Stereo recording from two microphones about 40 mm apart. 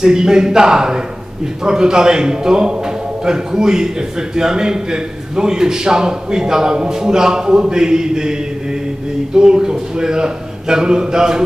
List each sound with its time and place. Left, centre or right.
0.0 s a man's voice: centre